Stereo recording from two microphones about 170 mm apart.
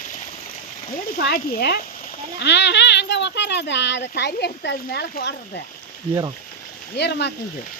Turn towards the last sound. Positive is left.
turn(degrees=80)